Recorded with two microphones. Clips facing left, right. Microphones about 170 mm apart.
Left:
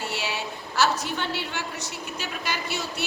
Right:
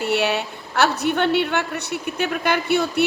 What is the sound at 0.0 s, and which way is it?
A woman's voice, 65° right (ahead or behind).